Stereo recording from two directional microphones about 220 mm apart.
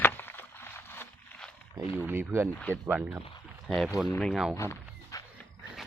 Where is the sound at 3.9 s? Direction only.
15° left (ahead or behind).